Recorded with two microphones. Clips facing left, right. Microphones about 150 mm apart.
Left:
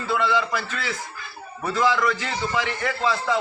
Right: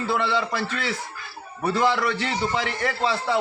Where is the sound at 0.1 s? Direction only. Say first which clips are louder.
Left 3 dB; 30° right (ahead or behind).